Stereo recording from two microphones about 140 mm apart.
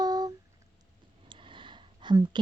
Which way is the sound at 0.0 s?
30° right (ahead or behind).